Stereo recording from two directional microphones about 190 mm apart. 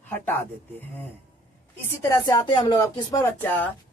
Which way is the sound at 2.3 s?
20° left (ahead or behind).